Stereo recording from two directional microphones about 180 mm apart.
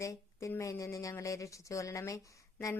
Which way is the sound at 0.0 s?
15° left (ahead or behind).